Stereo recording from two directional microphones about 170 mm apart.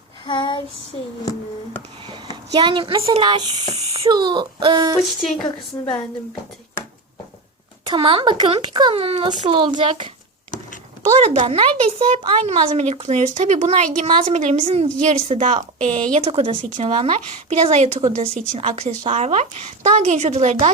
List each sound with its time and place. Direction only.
0.3 s female singing: 30° left (ahead or behind)
2.0 s speech: 25° right (ahead or behind)
4.9 s speech: centre (ahead or behind)
7.9 s speech: 30° right (ahead or behind)
11.2 s a woman's voice: 35° right (ahead or behind)
16.2 s speech: 35° right (ahead or behind)
16.6 s a woman's voice: 45° right (ahead or behind)